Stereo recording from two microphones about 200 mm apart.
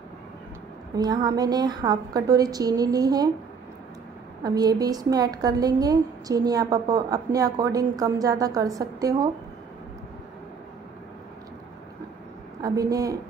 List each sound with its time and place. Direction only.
0.9 s a woman's voice: 20° right (ahead or behind)
4.4 s a woman's voice: 20° right (ahead or behind)
12.6 s a woman's voice: 20° right (ahead or behind)